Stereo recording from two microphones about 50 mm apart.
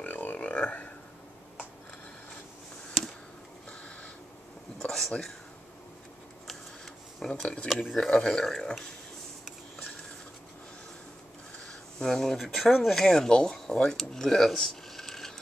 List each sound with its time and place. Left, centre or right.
0.0 s a sound: left
4.7 s a sound: centre
7.2 s speech: centre
12.0 s speech: centre
12.4 s speech: centre
13.0 s speech: centre